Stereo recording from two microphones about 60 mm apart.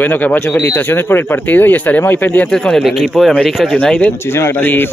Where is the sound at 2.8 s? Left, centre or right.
Centre.